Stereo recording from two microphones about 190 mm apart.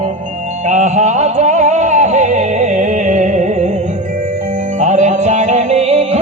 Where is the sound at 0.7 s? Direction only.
40° right (ahead or behind).